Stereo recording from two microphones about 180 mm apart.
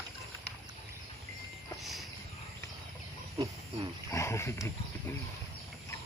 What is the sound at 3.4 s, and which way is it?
Wild animals, 25° right (ahead or behind).